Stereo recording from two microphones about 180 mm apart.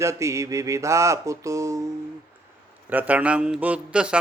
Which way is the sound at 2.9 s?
10° right (ahead or behind).